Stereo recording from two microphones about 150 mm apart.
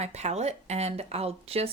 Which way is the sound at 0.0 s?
45° right (ahead or behind).